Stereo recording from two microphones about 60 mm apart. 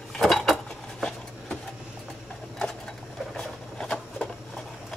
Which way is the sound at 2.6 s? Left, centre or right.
Centre.